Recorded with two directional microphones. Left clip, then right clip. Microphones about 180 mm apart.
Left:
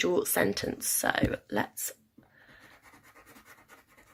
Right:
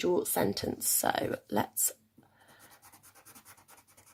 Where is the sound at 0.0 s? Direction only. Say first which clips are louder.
Left 2 dB; 35° right (ahead or behind); by 2.0 s 55° right (ahead or behind).